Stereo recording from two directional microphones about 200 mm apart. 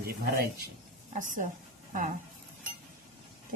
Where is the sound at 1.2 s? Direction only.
40° right (ahead or behind).